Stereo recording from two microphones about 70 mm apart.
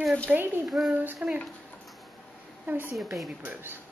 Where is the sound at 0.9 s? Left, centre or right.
Right.